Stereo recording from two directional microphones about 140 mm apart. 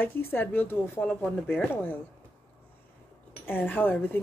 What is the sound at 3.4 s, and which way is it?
Speech, 15° left (ahead or behind).